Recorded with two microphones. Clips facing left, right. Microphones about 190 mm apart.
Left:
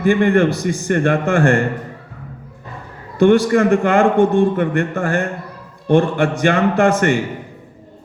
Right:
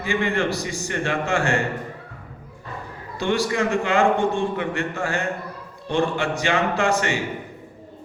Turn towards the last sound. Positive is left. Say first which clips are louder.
# left 7 dB
turn(degrees=55)  # may be behind; listen again after turning